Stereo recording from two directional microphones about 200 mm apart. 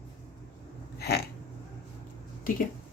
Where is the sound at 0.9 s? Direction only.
50° left (ahead or behind).